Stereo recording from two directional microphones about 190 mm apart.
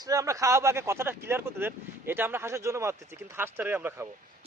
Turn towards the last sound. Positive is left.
turn(degrees=-10)  # may be behind; listen again after turning